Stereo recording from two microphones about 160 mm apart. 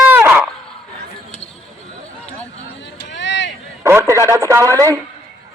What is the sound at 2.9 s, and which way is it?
Vehicle, 90° left.